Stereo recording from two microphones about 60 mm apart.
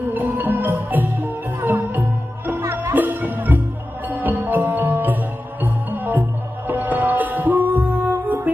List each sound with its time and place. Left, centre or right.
0.1 s music: right
2.6 s music: right
2.9 s music: right